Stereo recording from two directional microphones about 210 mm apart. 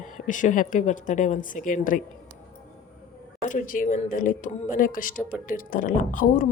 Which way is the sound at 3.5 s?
40° left (ahead or behind).